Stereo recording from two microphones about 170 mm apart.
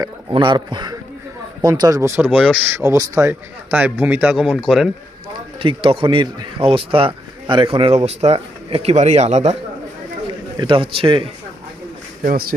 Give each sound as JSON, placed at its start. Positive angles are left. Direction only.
{"t": 0.0, "sound": "speech", "side_deg": -25}
{"t": 5.5, "sound": "speech", "side_deg": -30}
{"t": 10.6, "sound": "a man's voice", "side_deg": -30}
{"t": 12.2, "sound": "speech", "side_deg": -55}